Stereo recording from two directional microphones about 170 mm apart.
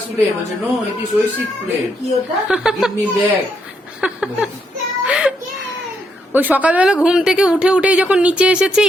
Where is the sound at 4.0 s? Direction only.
5° right (ahead or behind).